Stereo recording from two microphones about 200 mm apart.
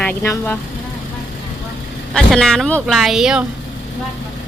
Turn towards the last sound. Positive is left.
turn(degrees=-5)  # may be behind; listen again after turning